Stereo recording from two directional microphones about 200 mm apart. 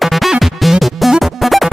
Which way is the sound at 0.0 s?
Centre (ahead or behind).